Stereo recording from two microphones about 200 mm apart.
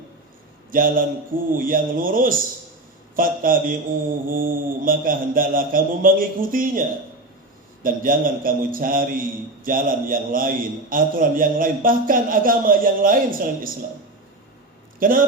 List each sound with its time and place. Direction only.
0.7 s a man's voice: 45° right (ahead or behind)
7.9 s a man's voice: 45° right (ahead or behind)
14.9 s speech: 45° right (ahead or behind)